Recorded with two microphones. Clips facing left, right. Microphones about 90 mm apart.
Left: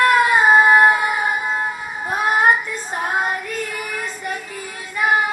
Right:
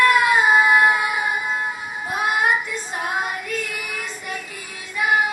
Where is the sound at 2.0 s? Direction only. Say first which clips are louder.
Left 4 dB; 40° left (ahead or behind).